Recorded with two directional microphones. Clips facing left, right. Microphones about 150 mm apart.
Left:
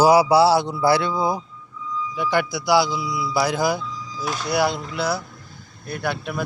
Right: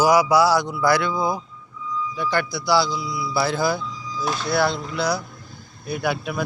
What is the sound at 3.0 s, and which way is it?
Speech, 25° right (ahead or behind).